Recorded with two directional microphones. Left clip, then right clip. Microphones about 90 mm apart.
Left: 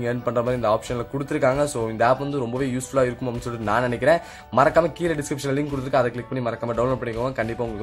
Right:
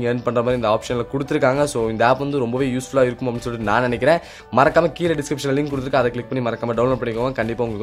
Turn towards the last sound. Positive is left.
turn(degrees=-25)  # may be behind; listen again after turning